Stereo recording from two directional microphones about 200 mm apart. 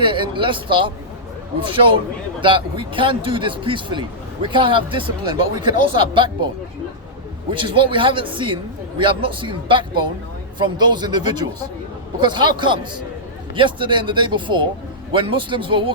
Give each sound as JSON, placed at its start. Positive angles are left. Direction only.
{"t": 0.0, "sound": "speech", "side_deg": -25}
{"t": 7.5, "sound": "speech", "side_deg": -25}